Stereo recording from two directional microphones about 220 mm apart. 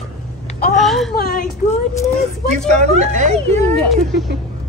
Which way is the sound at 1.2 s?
45° left (ahead or behind).